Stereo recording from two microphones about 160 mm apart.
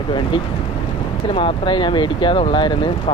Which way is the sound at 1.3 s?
30° left (ahead or behind).